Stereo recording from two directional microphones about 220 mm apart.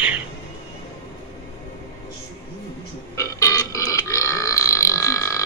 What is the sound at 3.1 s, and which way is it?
Burping, 15° left (ahead or behind).